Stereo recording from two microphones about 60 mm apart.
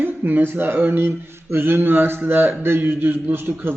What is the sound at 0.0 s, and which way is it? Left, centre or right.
Speech, right.